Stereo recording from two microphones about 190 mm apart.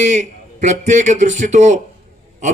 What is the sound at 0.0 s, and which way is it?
A man's voice, 40° right (ahead or behind).